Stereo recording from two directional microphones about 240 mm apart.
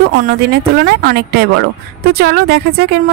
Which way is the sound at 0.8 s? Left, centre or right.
Right.